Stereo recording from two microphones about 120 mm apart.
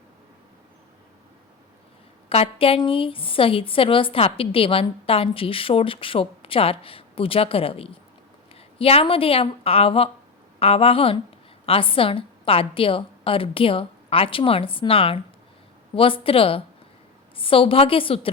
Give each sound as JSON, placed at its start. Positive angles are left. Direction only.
{"t": 2.3, "sound": "a woman's voice", "side_deg": 50}